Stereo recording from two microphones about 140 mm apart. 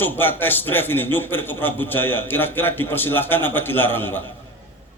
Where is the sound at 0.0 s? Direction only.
15° left (ahead or behind).